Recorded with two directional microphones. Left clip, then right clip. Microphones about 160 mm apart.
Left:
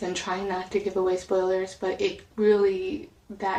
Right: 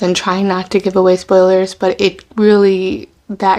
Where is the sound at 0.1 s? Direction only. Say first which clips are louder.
Right 14 dB; 40° right (ahead or behind).